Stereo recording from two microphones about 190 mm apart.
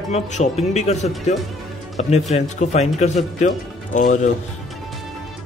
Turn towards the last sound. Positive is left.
turn(degrees=40)  # may be behind; listen again after turning